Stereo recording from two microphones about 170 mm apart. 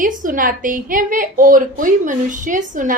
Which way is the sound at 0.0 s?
50° right (ahead or behind).